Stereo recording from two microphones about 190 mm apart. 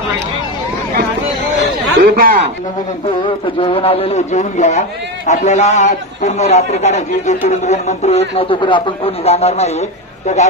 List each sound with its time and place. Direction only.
2.0 s speech: 55° right (ahead or behind)
3.4 s a man's voice: 30° left (ahead or behind)